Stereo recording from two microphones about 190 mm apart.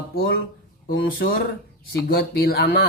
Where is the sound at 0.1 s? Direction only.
50° left (ahead or behind).